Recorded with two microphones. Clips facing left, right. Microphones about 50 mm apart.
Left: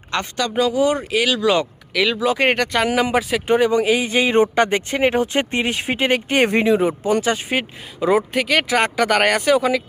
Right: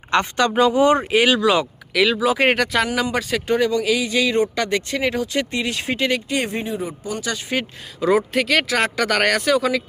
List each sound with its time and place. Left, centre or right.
0.3 s speech: right
1.4 s speech: centre
2.8 s speech: centre
3.4 s speech: left
6.1 s speech: left
6.6 s speech: left
7.2 s speech: left
7.9 s speech: centre